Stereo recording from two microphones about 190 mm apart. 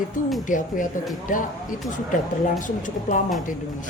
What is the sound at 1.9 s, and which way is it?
Speech, 40° left (ahead or behind).